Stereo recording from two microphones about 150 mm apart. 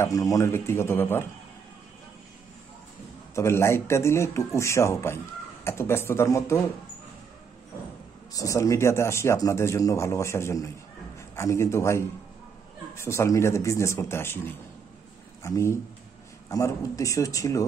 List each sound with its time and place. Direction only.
0.0 s speech: 25° left (ahead or behind)
3.3 s speech: 15° left (ahead or behind)
8.3 s a man's voice: 20° left (ahead or behind)